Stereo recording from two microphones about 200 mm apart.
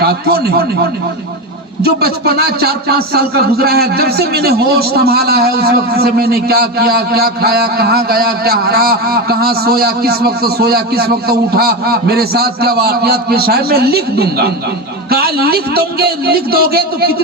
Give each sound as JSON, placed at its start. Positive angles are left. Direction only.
{"t": 0.0, "sound": "speech", "side_deg": -50}
{"t": 1.8, "sound": "speech", "side_deg": -50}